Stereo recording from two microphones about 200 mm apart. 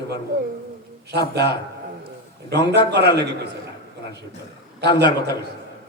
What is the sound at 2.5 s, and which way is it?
A man's voice, 55° right (ahead or behind).